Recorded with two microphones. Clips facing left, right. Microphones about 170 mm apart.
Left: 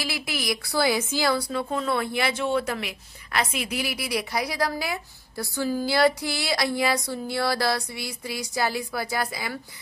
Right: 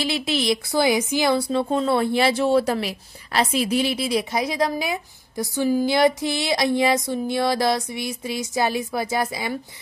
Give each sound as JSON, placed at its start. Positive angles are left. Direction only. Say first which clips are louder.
{"t": 0.0, "sound": "speech", "louder": "right 7 dB", "side_deg": -25}